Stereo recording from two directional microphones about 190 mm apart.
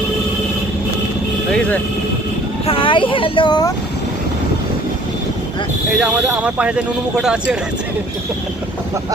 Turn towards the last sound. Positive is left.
turn(degrees=-5)  # may be behind; listen again after turning